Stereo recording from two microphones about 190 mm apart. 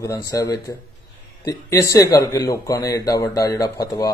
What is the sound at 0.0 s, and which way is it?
Speech, 15° left (ahead or behind).